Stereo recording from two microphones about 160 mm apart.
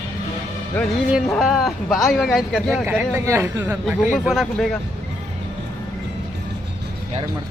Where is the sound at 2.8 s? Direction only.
15° right (ahead or behind).